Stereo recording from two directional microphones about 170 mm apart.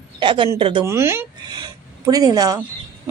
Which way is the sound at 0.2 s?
30° right (ahead or behind).